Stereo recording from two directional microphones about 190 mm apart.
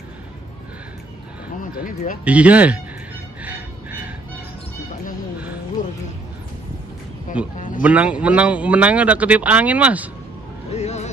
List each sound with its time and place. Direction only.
1.6 s speech: 45° left (ahead or behind)
2.2 s a man's voice: 5° right (ahead or behind)
3.4 s music: 10° right (ahead or behind)
7.5 s a sound: 45° left (ahead or behind)
7.8 s a man's voice: 5° right (ahead or behind)
10.7 s vehicle: 35° left (ahead or behind)